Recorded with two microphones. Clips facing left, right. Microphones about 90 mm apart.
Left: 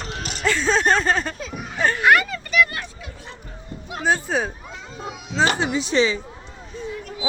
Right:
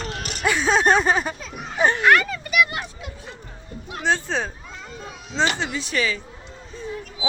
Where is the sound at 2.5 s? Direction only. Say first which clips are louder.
Left 1 dB; 20° right (ahead or behind).